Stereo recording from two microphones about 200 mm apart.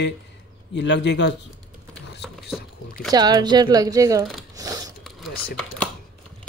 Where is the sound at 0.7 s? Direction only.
60° left (ahead or behind).